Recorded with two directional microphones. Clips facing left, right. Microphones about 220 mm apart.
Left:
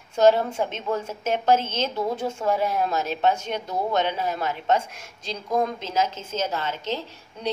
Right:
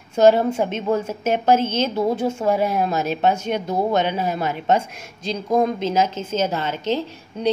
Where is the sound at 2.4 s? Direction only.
10° right (ahead or behind).